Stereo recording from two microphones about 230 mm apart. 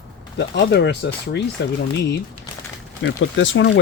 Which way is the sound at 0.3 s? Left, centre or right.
Left.